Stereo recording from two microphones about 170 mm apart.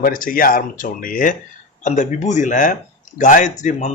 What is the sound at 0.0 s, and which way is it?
Speech, 55° left (ahead or behind).